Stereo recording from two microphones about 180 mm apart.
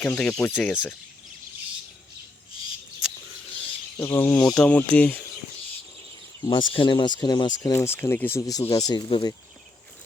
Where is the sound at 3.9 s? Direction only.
10° left (ahead or behind).